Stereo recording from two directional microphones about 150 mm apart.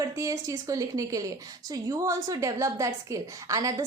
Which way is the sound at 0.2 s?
20° right (ahead or behind).